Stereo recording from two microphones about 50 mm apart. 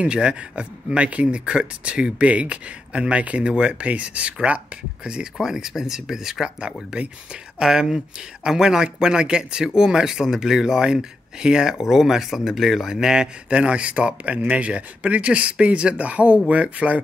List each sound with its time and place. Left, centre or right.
0.0 s speech: right
6.4 s speech: centre
13.5 s speech: right